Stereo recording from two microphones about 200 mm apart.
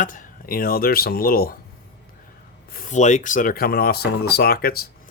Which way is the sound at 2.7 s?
40° left (ahead or behind).